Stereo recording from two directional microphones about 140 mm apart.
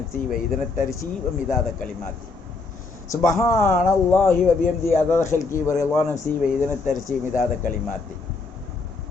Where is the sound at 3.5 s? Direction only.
65° left (ahead or behind).